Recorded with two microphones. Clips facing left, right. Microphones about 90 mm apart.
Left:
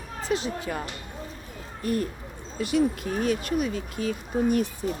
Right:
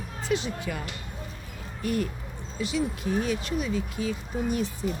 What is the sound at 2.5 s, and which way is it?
Speech, 50° left (ahead or behind).